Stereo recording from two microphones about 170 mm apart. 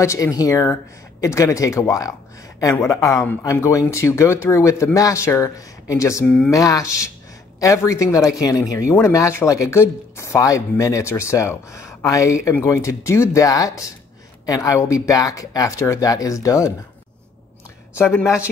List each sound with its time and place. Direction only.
0.0 s speech: 20° left (ahead or behind)
17.9 s speech: 15° left (ahead or behind)